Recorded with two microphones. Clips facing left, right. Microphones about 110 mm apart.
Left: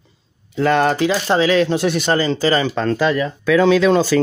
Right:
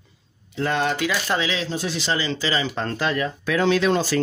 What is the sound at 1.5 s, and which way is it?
Speech, 65° left (ahead or behind).